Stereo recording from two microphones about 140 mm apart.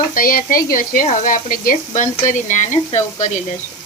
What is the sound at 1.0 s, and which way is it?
Speech, 75° left (ahead or behind).